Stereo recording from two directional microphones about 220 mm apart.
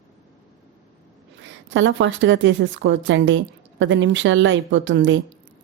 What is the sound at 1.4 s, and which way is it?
Speech, 55° right (ahead or behind).